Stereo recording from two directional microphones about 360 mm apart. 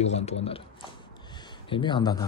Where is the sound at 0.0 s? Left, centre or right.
Centre.